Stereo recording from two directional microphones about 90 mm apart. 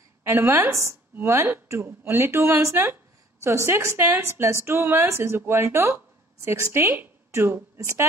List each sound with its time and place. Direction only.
0.2 s a woman's voice: 25° right (ahead or behind)